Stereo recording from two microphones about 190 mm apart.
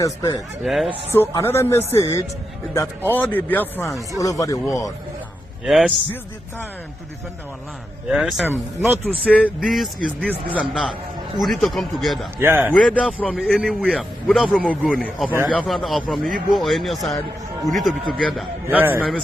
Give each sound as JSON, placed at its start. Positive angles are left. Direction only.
{"t": 0.0, "sound": "speech", "side_deg": 20}
{"t": 0.6, "sound": "a man's voice", "side_deg": 0}
{"t": 1.1, "sound": "speech", "side_deg": 15}
{"t": 5.6, "sound": "a man's voice", "side_deg": 0}
{"t": 8.1, "sound": "a man's voice", "side_deg": 0}
{"t": 9.6, "sound": "a man's voice", "side_deg": 0}
{"t": 12.4, "sound": "speech", "side_deg": -10}
{"t": 13.0, "sound": "a man's voice", "side_deg": 5}
{"t": 18.9, "sound": "a man's voice", "side_deg": 5}